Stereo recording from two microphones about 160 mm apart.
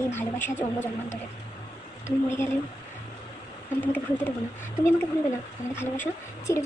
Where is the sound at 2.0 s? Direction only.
15° left (ahead or behind).